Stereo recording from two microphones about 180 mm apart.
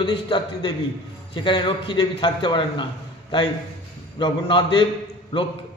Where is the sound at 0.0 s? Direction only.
30° left (ahead or behind).